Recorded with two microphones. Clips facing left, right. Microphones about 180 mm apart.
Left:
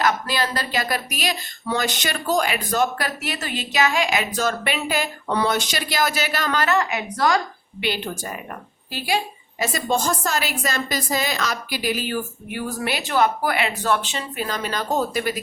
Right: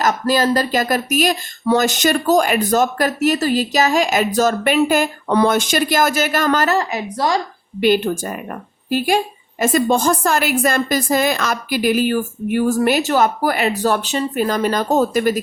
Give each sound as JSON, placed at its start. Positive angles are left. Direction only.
{"t": 0.0, "sound": "speech", "side_deg": -45}
{"t": 7.8, "sound": "speech", "side_deg": -45}